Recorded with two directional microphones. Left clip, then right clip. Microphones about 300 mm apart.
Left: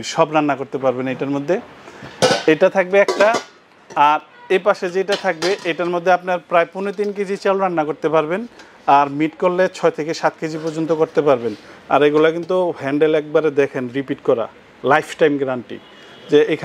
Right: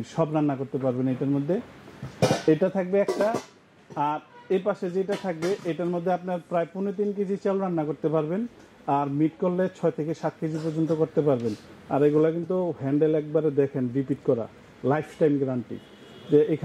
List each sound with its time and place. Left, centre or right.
0.1 s a man's voice: centre